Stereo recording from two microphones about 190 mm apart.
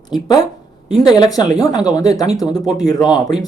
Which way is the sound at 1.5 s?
20° left (ahead or behind).